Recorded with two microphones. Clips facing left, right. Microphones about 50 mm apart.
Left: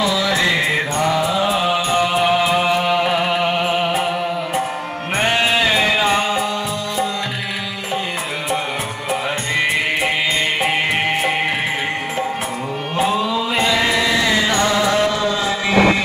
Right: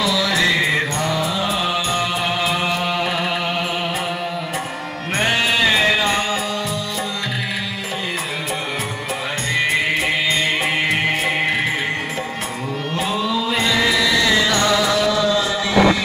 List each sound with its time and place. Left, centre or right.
0.0 s mantra: left
0.5 s music: centre
5.1 s music: centre
10.6 s music: centre
12.9 s music: centre
13.8 s music: left